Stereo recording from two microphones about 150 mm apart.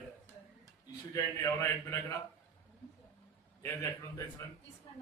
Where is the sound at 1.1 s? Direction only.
20° left (ahead or behind).